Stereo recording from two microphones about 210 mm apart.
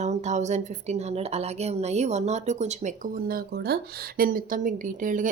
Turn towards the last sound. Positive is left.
turn(degrees=-40)  # may be behind; listen again after turning